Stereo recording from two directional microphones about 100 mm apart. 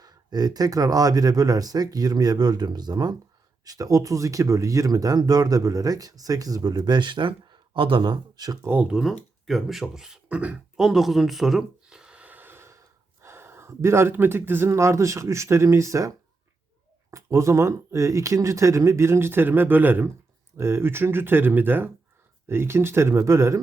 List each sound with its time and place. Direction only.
0.0 s speech: 40° right (ahead or behind)
8.6 s speech: 20° right (ahead or behind)
8.9 s speech: 5° right (ahead or behind)
10.8 s gasp: 5° right (ahead or behind); by 12.8 s 25° right (ahead or behind)
13.2 s speech: 25° right (ahead or behind)